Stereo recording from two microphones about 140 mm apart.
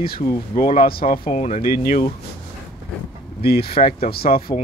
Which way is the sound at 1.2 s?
50° left (ahead or behind).